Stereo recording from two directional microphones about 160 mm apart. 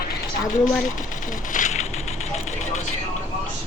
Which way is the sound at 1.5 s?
50° left (ahead or behind).